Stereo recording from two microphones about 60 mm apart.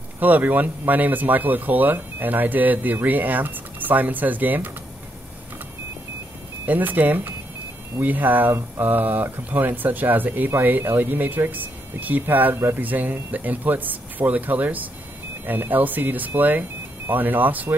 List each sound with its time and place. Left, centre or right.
0.2 s speech: right
6.6 s speech: right
12.5 s speech: right
12.8 s speech: right